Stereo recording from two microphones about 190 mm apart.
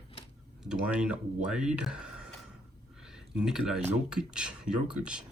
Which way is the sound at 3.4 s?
5° right (ahead or behind).